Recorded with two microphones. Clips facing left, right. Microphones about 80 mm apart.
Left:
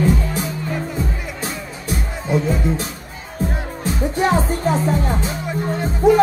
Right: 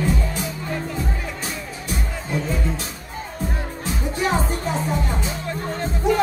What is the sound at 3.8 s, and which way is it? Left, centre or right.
Music, left.